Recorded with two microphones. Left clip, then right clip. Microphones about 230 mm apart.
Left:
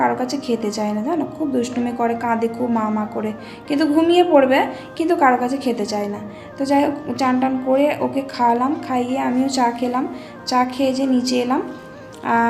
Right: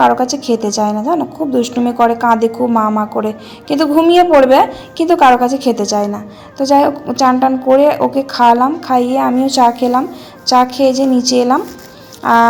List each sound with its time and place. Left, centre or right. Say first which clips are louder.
0.2 s a woman's voice: right 7 dB; right